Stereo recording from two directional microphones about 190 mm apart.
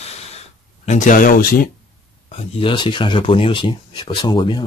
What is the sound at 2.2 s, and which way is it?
Speech, 25° left (ahead or behind).